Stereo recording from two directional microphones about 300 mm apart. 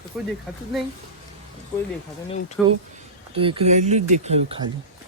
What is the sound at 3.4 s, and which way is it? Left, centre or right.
Speech, centre.